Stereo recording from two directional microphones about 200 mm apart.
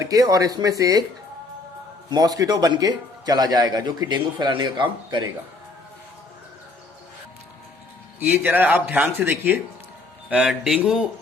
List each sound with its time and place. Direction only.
0.0 s speech: 15° right (ahead or behind)
2.0 s a man's voice: 20° right (ahead or behind)
8.4 s speech: 10° right (ahead or behind)